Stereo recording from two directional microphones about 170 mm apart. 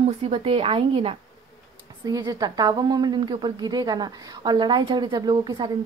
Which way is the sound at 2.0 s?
20° right (ahead or behind).